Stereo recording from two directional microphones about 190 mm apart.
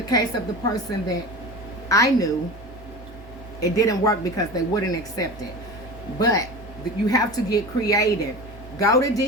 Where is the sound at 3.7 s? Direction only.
20° left (ahead or behind).